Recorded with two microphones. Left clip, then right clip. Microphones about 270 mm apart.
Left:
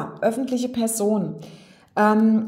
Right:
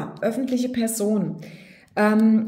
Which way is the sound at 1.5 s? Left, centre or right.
Centre.